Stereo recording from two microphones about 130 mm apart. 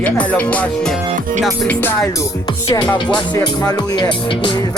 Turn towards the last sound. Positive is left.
turn(degrees=30)  # may be behind; listen again after turning